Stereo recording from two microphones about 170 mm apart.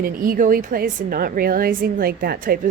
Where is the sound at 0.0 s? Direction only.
55° right (ahead or behind).